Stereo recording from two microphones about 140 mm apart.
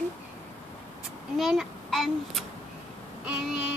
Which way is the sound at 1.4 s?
Centre (ahead or behind).